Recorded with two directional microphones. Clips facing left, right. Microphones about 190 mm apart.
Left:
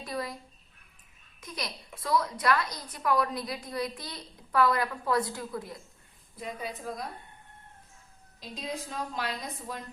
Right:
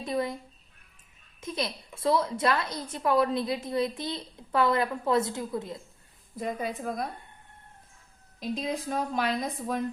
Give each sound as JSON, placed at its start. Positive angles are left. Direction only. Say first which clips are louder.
{"t": 0.0, "sound": "speech", "louder": "right 6 dB", "side_deg": -25}
{"t": 1.4, "sound": "a woman's voice", "louder": "right 6 dB", "side_deg": -25}
{"t": 6.3, "sound": "a woman's voice", "louder": "right 6 dB", "side_deg": -50}
{"t": 8.4, "sound": "a woman's voice", "louder": "right 6 dB", "side_deg": -55}